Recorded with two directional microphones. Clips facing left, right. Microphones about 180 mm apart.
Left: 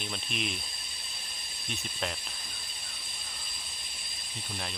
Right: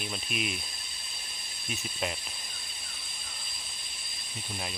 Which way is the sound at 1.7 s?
5° right (ahead or behind).